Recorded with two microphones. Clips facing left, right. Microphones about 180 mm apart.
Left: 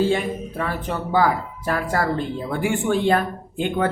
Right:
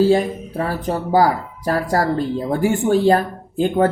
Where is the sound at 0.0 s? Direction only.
40° right (ahead or behind).